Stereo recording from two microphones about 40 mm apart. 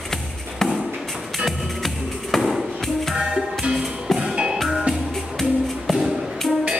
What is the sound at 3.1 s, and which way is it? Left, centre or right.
Music, centre.